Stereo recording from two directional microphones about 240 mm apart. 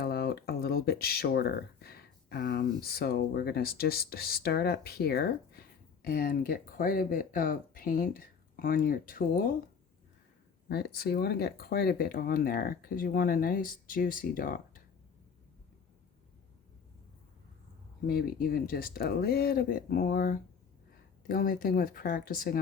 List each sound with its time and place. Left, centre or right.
0.0 s speech: left
10.7 s speech: left
18.1 s speech: left